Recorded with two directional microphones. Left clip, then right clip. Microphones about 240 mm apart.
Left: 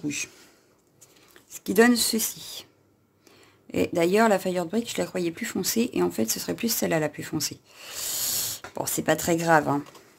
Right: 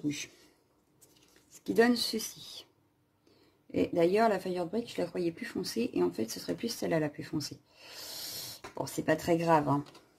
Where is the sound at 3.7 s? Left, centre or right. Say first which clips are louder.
Left 5 dB; left.